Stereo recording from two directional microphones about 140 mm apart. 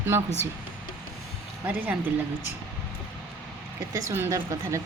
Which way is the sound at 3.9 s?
20° right (ahead or behind).